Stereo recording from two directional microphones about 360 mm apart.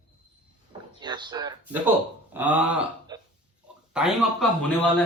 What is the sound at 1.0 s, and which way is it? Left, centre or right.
A man's voice, centre.